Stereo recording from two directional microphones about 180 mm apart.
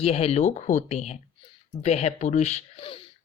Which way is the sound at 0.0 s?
35° left (ahead or behind).